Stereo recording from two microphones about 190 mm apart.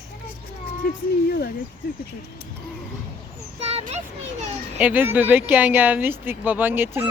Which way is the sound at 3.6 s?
35° right (ahead or behind).